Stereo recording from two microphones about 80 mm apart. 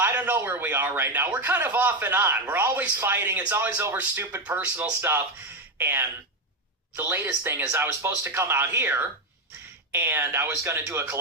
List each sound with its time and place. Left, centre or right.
0.0 s speech: right